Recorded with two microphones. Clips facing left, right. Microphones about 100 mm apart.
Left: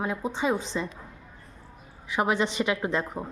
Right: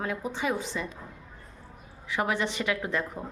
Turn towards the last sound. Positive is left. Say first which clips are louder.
# left 3 dB
turn(degrees=20)  # may be behind; listen again after turning